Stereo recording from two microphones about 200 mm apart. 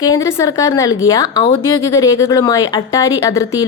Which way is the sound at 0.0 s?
15° left (ahead or behind).